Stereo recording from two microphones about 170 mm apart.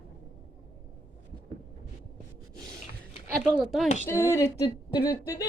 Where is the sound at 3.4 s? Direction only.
Centre (ahead or behind).